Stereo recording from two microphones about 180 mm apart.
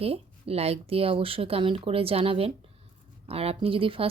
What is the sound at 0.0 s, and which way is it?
Speech, 35° right (ahead or behind).